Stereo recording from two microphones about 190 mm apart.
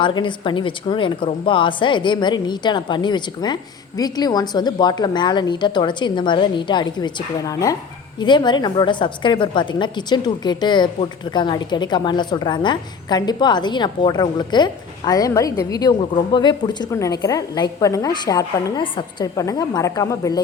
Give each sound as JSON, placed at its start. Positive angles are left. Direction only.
{"t": 0.0, "sound": "a woman's voice", "side_deg": 25}